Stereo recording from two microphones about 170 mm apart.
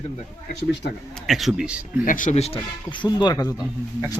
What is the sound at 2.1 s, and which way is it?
Speech, 50° left (ahead or behind).